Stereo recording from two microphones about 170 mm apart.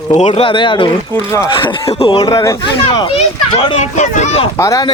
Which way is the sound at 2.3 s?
20° left (ahead or behind).